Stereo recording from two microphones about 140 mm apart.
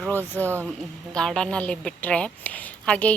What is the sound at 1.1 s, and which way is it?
A woman's voice, 5° left (ahead or behind).